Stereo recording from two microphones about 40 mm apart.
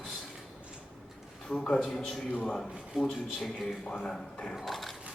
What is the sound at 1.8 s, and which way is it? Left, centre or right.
A man's voice, centre.